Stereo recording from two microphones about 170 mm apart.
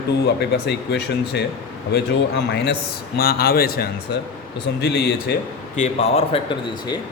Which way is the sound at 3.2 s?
65° left (ahead or behind).